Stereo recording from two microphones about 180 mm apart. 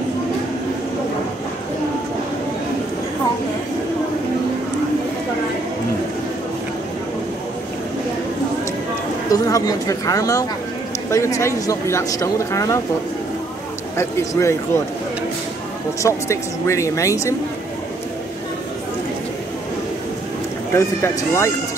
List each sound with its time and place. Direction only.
9.3 s speech: 20° left (ahead or behind)
13.9 s speech: 15° left (ahead or behind)
16.0 s speech: 15° left (ahead or behind)
20.7 s speech: 15° left (ahead or behind)